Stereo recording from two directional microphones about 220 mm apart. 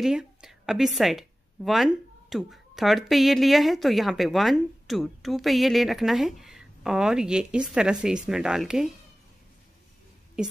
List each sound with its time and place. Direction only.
0.0 s a woman's voice: 5° right (ahead or behind)